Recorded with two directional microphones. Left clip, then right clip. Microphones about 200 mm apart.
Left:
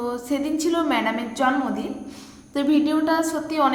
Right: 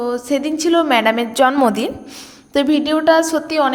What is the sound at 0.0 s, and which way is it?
A woman's voice, 30° right (ahead or behind).